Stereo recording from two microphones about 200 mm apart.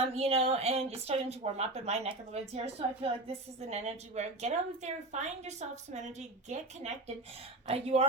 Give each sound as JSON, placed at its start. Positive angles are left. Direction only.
{"t": 0.0, "sound": "a woman's voice", "side_deg": -30}